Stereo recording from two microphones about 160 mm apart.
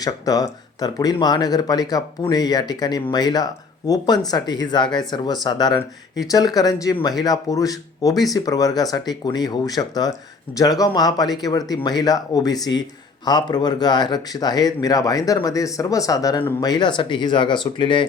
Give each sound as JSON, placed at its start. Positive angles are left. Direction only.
{"t": 0.0, "sound": "speech", "side_deg": 25}